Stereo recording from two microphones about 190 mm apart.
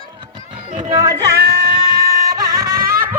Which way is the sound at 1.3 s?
55° right (ahead or behind).